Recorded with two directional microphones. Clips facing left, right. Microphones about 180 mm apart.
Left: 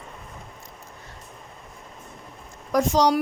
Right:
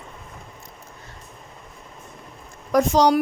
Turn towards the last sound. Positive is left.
turn(degrees=-60)  # may be behind; listen again after turning